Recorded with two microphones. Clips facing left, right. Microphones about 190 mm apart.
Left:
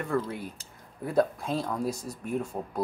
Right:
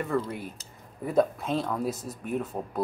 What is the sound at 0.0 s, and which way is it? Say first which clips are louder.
Speech: right 1 dB; centre (ahead or behind).